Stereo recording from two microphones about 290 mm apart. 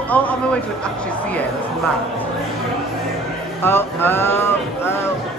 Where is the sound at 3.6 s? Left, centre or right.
Centre.